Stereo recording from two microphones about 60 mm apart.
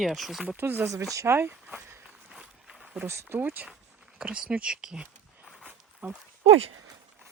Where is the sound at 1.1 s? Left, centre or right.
Right.